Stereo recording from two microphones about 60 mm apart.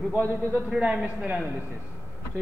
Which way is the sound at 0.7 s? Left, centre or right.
Centre.